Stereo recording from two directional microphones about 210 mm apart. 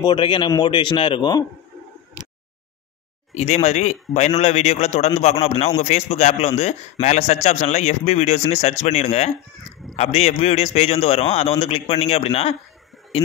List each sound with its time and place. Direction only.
0.0 s a man's voice: 20° left (ahead or behind)
3.3 s a man's voice: 30° left (ahead or behind)